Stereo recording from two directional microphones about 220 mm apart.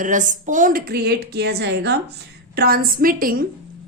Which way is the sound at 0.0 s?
35° right (ahead or behind).